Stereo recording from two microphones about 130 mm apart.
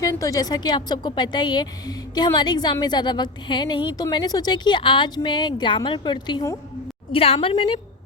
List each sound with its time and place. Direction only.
0.0 s a woman's voice: 25° left (ahead or behind)
7.1 s a woman's voice: 45° left (ahead or behind)